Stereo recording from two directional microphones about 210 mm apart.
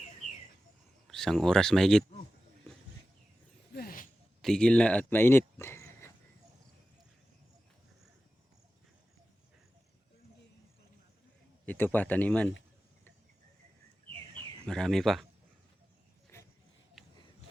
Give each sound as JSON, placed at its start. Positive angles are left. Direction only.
{"t": 1.0, "sound": "speech", "side_deg": 0}
{"t": 3.7, "sound": "a sound", "side_deg": 45}
{"t": 4.4, "sound": "speech", "side_deg": 5}
{"t": 11.6, "sound": "speech", "side_deg": 10}
{"t": 14.7, "sound": "speech", "side_deg": 0}
{"t": 16.3, "sound": "a sound", "side_deg": 10}